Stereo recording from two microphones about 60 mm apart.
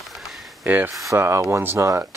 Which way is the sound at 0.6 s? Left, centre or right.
Right.